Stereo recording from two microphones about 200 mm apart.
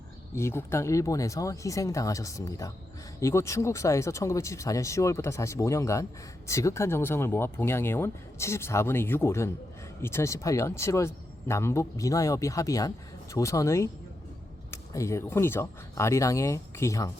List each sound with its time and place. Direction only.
0.3 s speech: 15° left (ahead or behind)